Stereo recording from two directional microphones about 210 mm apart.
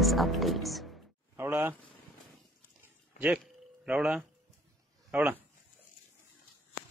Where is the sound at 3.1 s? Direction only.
5° right (ahead or behind).